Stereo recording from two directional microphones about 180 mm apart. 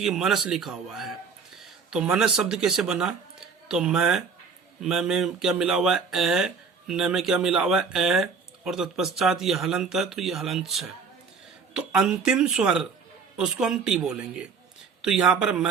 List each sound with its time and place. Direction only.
0.0 s speech: centre (ahead or behind)